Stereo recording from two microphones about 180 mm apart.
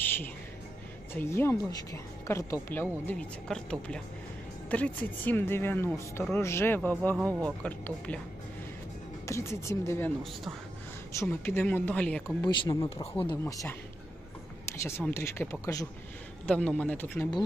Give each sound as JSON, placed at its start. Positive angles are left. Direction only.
{"t": 0.0, "sound": "music", "side_deg": 10}
{"t": 1.1, "sound": "speech", "side_deg": 15}
{"t": 9.2, "sound": "speech", "side_deg": 15}
{"t": 11.1, "sound": "speech", "side_deg": 10}
{"t": 12.4, "sound": "speech", "side_deg": 25}
{"t": 13.4, "sound": "speech", "side_deg": 15}
{"t": 14.8, "sound": "speech", "side_deg": 15}
{"t": 16.4, "sound": "speech", "side_deg": 5}